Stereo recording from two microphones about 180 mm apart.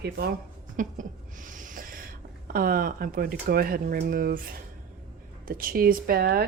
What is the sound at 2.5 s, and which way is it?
Speech, 55° right (ahead or behind).